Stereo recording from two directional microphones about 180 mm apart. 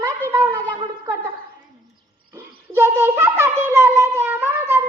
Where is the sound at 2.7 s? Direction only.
15° right (ahead or behind).